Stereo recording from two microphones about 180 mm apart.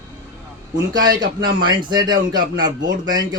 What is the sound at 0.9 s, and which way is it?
Speech, 20° right (ahead or behind).